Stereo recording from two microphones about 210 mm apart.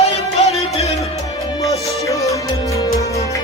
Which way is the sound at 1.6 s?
15° left (ahead or behind).